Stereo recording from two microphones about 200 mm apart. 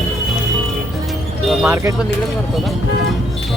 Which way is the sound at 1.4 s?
Centre (ahead or behind).